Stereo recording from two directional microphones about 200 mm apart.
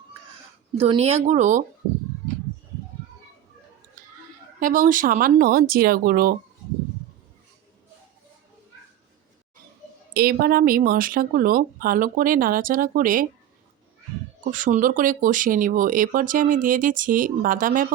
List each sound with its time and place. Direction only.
0.8 s speech: 30° right (ahead or behind)
4.6 s speech: 40° right (ahead or behind)
10.2 s speech: 50° right (ahead or behind)
14.5 s speech: 40° right (ahead or behind)